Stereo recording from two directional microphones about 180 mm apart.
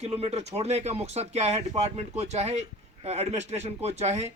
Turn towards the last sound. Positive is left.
turn(degrees=-35)  # may be behind; listen again after turning